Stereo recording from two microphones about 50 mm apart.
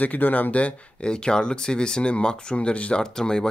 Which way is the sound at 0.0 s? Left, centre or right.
Left.